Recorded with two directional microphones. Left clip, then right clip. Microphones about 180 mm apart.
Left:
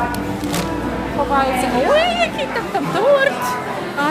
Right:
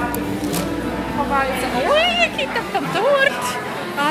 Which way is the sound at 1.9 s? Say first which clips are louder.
Left 1 dB; 20° left (ahead or behind).